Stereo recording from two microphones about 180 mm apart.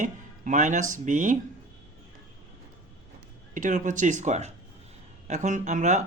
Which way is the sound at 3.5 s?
45° right (ahead or behind).